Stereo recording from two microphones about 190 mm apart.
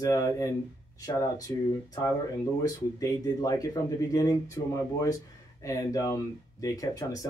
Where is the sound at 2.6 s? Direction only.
20° left (ahead or behind).